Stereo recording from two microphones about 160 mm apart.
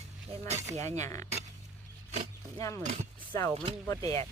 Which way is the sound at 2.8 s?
45° right (ahead or behind).